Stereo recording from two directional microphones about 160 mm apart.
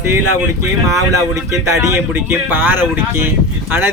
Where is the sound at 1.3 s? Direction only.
20° right (ahead or behind).